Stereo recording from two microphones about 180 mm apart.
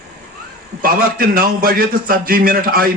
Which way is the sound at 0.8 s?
55° right (ahead or behind).